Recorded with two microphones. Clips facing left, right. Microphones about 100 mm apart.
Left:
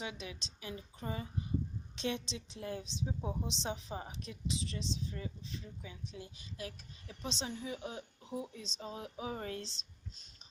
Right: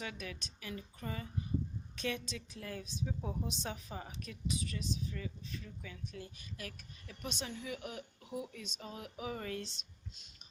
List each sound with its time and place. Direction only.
0.0 s speech: 20° left (ahead or behind)